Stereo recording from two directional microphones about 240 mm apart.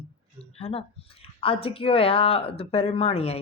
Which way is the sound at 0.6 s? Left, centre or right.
Left.